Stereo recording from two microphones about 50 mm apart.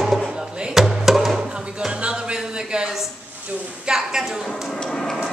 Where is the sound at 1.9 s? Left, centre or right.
Right.